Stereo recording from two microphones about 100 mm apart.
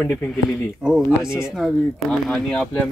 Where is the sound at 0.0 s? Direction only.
10° left (ahead or behind).